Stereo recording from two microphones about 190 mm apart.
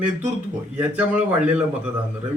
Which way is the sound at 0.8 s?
10° right (ahead or behind).